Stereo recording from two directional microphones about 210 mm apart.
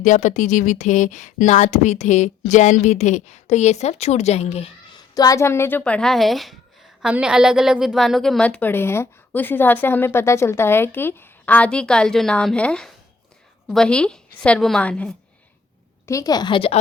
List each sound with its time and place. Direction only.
0.0 s a woman's voice: 35° left (ahead or behind); by 15.1 s 5° left (ahead or behind)
16.0 s a woman's voice: 15° left (ahead or behind)